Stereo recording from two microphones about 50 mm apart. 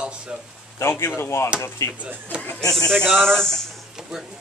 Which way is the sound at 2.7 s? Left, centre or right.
Centre.